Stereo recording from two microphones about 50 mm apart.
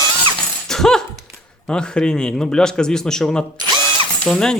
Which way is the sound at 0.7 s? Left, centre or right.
Centre.